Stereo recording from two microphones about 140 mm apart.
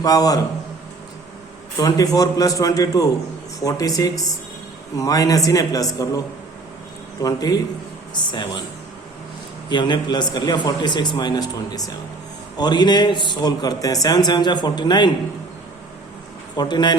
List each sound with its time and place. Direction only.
0.0 s a man's voice: 25° left (ahead or behind)
1.8 s a man's voice: 25° left (ahead or behind)
9.6 s a man's voice: 30° left (ahead or behind)
16.6 s a man's voice: 30° left (ahead or behind)